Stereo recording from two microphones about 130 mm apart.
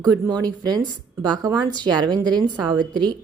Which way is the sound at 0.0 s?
30° right (ahead or behind).